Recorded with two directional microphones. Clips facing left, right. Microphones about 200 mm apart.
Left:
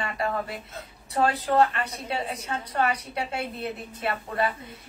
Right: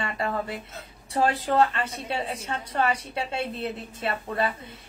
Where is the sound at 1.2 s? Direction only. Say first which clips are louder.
Even; 25° right (ahead or behind).